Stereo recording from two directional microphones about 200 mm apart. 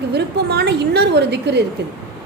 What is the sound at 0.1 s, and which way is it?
A woman's voice, 55° right (ahead or behind).